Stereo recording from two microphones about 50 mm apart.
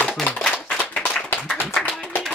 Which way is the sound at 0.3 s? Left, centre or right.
Left.